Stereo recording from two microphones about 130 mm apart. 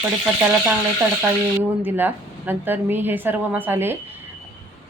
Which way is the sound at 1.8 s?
15° right (ahead or behind).